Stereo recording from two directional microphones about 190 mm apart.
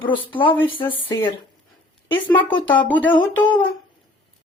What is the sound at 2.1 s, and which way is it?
Speech, 10° left (ahead or behind).